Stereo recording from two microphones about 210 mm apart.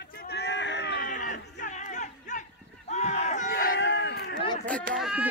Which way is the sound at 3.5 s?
50° left (ahead or behind).